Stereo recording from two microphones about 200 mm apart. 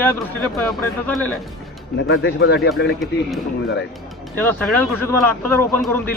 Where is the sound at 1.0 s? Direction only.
5° left (ahead or behind).